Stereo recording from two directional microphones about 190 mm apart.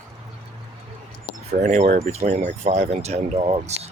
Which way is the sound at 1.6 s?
40° right (ahead or behind).